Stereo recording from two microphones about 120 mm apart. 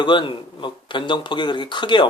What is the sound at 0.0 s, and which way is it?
Speech, 40° left (ahead or behind).